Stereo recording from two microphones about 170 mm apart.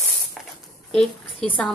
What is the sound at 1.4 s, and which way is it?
Speech, 10° left (ahead or behind).